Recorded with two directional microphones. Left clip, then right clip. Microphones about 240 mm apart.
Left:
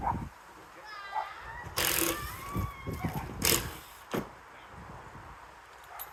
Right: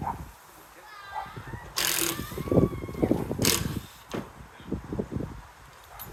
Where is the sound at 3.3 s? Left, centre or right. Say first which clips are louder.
Even; centre.